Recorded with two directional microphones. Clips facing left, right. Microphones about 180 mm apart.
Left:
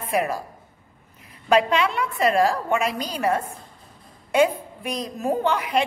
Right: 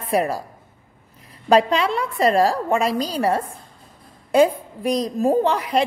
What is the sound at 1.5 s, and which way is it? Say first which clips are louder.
A woman's voice: right 3 dB; 35° right (ahead or behind).